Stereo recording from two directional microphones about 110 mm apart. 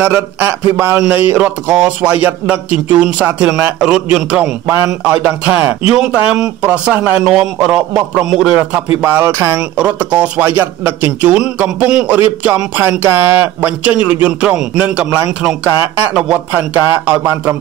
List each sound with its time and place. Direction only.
0.0 s a man's voice: 20° right (ahead or behind)
5.9 s a man's voice: 5° right (ahead or behind)
9.0 s a man's voice: 15° right (ahead or behind)
16.5 s a man's voice: 15° right (ahead or behind)